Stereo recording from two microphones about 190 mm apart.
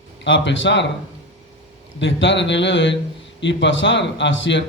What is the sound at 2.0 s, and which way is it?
A man's voice, 75° left (ahead or behind).